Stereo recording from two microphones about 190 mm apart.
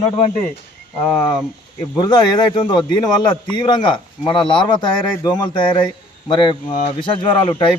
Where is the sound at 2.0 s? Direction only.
20° left (ahead or behind).